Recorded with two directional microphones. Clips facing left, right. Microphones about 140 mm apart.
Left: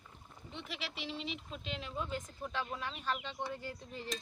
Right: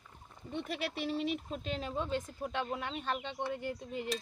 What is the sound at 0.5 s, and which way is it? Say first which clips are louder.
Speech: right 8 dB; 50° right (ahead or behind).